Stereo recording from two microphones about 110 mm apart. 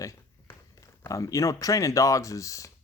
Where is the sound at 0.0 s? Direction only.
30° left (ahead or behind).